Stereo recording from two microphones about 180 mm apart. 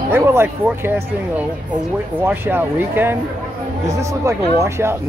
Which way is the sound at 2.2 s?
10° right (ahead or behind).